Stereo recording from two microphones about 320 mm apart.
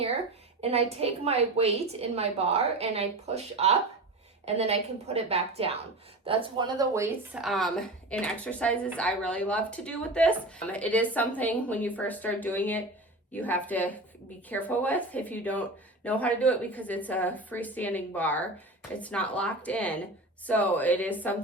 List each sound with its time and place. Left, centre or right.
0.6 s a woman's voice: centre